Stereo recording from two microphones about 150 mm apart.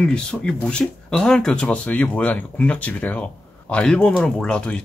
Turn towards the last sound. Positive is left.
turn(degrees=5)  # may be behind; listen again after turning